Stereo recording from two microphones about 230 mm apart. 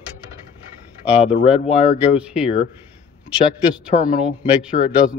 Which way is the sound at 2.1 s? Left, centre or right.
Centre.